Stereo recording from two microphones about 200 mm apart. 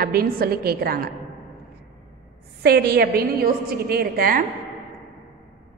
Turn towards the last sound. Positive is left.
turn(degrees=-45)  # may be behind; listen again after turning